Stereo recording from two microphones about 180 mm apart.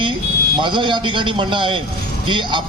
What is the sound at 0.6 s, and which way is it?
A man's voice, 25° right (ahead or behind).